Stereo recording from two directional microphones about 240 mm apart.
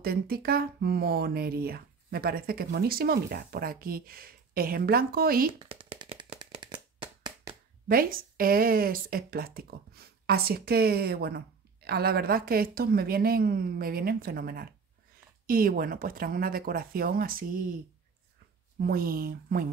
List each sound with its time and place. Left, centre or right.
0.0 s speech: right
5.5 s shuffling cards: right
7.9 s speech: right
18.8 s speech: right